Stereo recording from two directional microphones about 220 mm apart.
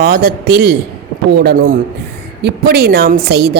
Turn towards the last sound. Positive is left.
turn(degrees=-45)  # may be behind; listen again after turning